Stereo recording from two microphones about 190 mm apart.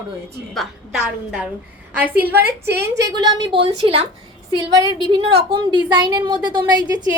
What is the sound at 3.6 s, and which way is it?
A woman's voice, 35° right (ahead or behind).